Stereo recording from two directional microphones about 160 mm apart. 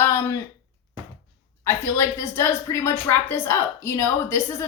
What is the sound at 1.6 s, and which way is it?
Speech, 15° left (ahead or behind).